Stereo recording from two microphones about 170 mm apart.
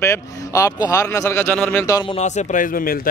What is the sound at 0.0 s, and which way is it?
Speech, 15° left (ahead or behind).